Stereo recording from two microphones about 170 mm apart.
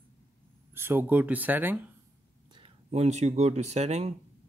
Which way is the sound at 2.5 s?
35° right (ahead or behind).